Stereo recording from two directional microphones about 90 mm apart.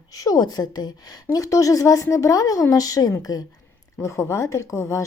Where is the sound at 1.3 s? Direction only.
40° left (ahead or behind).